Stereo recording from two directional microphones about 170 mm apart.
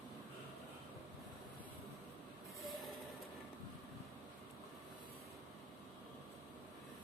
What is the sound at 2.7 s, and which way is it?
Vehicle, centre (ahead or behind).